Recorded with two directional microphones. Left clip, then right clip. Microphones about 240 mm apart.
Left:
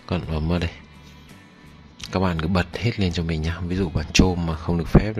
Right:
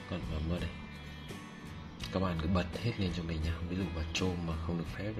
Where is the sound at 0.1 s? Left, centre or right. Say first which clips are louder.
Left 14 dB; left.